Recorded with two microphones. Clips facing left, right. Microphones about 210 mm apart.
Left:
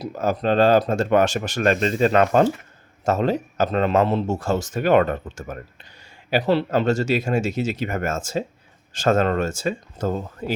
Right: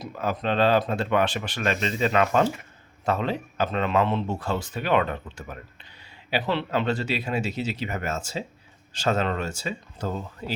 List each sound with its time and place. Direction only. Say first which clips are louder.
0.0 s speech: left 5 dB; 40° left (ahead or behind)